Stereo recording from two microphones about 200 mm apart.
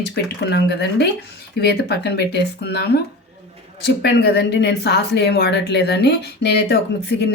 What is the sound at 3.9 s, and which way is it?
Speech, 55° left (ahead or behind).